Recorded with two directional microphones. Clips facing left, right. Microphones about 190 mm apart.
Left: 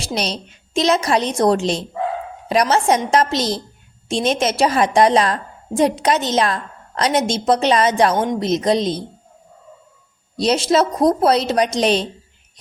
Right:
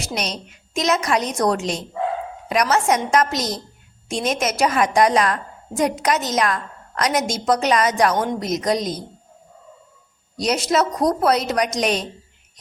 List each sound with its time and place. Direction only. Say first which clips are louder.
0.0 s a woman's voice: left 3 dB; 30° left (ahead or behind)
10.3 s a woman's voice: left 4 dB; 30° left (ahead or behind)